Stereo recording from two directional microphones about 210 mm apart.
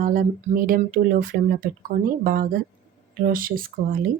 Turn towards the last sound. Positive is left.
turn(degrees=-45)  # may be behind; listen again after turning